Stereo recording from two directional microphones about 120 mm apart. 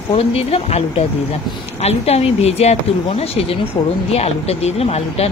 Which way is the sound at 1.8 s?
55° left (ahead or behind).